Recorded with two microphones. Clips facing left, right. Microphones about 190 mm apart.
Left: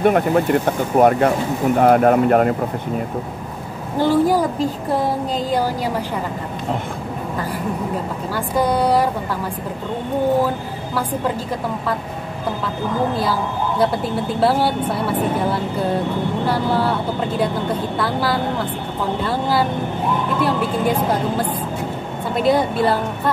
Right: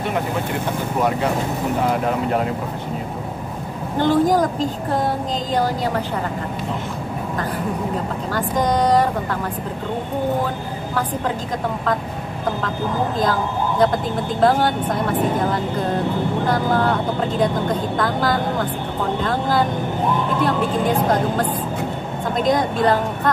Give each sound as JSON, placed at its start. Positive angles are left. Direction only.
{"t": 0.0, "sound": "speech", "side_deg": 55}
{"t": 4.0, "sound": "speech", "side_deg": 10}
{"t": 8.5, "sound": "speech", "side_deg": 10}
{"t": 13.2, "sound": "a woman's voice", "side_deg": 10}
{"t": 20.3, "sound": "speech", "side_deg": 10}